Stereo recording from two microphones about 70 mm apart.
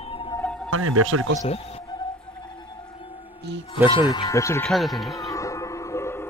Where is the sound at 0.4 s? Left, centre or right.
Centre.